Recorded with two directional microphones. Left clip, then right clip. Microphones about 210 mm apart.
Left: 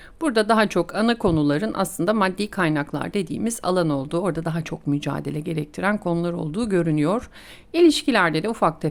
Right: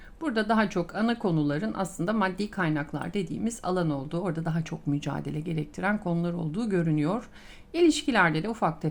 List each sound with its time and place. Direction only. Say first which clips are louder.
0.2 s a woman's voice: left 7 dB; 35° left (ahead or behind)